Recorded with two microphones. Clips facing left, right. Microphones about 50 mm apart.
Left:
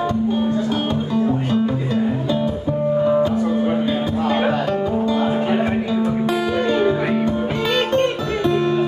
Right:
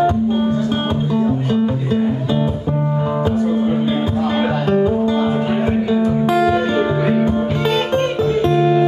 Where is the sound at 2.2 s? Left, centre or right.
Right.